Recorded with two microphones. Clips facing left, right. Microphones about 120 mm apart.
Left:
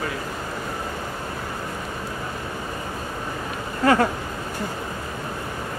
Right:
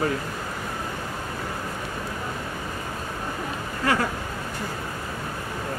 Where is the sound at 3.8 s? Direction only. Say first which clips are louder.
Left 6 dB; 40° left (ahead or behind).